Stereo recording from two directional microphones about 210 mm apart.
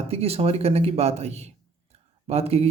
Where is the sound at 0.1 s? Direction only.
30° right (ahead or behind).